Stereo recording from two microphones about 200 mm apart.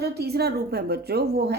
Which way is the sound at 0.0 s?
50° right (ahead or behind).